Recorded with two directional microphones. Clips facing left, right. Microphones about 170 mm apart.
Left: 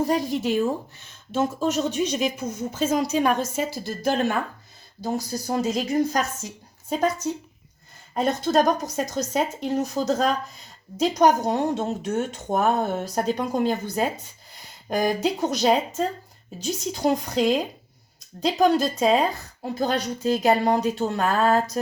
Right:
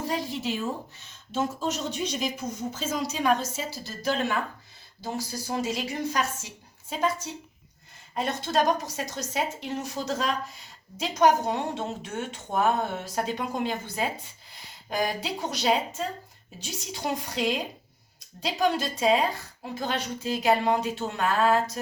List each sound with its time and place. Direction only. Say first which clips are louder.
0.1 s speech: left 7 dB; 50° left (ahead or behind)
5.5 s speech: left 6 dB; 40° left (ahead or behind)